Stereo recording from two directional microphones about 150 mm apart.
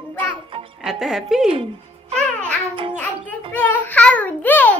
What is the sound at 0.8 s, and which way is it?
Speech, 5° right (ahead or behind).